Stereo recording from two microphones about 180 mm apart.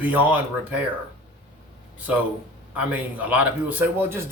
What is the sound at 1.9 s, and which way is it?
A man's voice, 10° right (ahead or behind).